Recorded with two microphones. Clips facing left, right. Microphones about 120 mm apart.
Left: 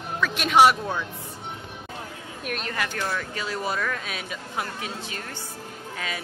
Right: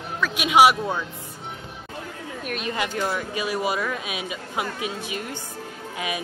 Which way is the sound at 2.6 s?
20° right (ahead or behind).